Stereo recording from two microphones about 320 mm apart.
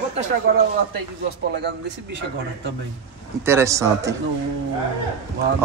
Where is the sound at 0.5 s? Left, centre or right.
Right.